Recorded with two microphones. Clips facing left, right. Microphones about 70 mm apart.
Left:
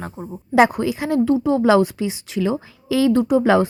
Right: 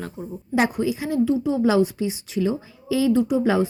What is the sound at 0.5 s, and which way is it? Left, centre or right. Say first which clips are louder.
A woman's voice: left 6 dB; left.